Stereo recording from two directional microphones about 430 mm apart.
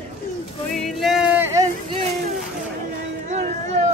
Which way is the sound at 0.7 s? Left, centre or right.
Centre.